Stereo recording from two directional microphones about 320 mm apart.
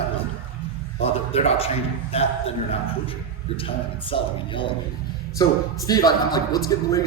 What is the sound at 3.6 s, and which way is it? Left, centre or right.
A man's voice, centre.